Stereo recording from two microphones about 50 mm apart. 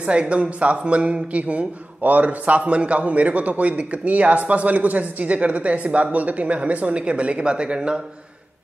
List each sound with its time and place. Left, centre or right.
0.0 s a man's voice: right